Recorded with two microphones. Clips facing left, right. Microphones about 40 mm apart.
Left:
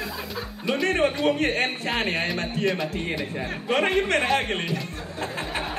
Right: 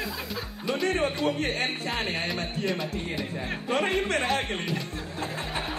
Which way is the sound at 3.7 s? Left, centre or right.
Left.